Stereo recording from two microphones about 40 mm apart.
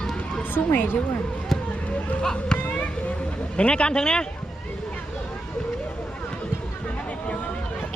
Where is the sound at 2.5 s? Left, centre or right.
Left.